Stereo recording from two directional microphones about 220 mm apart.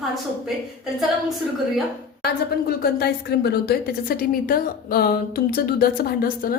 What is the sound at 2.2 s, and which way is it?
A woman's voice, 45° left (ahead or behind).